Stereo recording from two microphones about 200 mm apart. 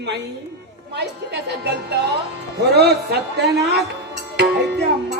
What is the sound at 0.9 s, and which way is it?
Speech, 55° right (ahead or behind).